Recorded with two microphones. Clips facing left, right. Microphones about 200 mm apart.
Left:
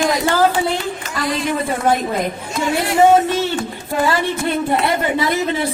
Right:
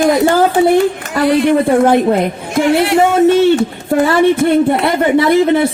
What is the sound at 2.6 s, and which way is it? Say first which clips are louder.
Speech: right 3 dB; 75° right (ahead or behind).